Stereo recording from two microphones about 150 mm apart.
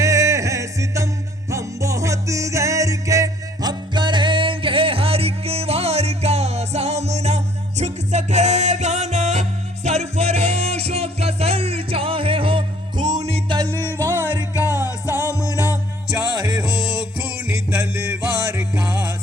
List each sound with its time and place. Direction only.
0.0 s music: 20° right (ahead or behind)
13.1 s music: 45° right (ahead or behind)
13.5 s music: 25° right (ahead or behind)
14.3 s music: 20° left (ahead or behind)
16.6 s music: 5° right (ahead or behind)